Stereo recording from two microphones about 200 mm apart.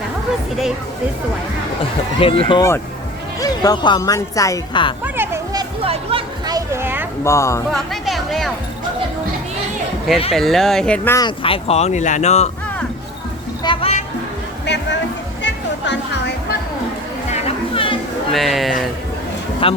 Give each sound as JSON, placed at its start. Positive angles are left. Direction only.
{"t": 2.2, "sound": "speech", "side_deg": 25}
{"t": 5.0, "sound": "music", "side_deg": -10}
{"t": 5.8, "sound": "a sound", "side_deg": -30}
{"t": 7.3, "sound": "speech", "side_deg": 15}
{"t": 7.7, "sound": "speech", "side_deg": 0}
{"t": 10.3, "sound": "speech", "side_deg": 0}
{"t": 11.3, "sound": "speech", "side_deg": 25}
{"t": 13.7, "sound": "music", "side_deg": 30}
{"t": 14.7, "sound": "a sound", "side_deg": 60}
{"t": 15.4, "sound": "music", "side_deg": 65}
{"t": 17.3, "sound": "chatter", "side_deg": 30}
{"t": 18.3, "sound": "speech", "side_deg": 0}
{"t": 19.6, "sound": "speech", "side_deg": 25}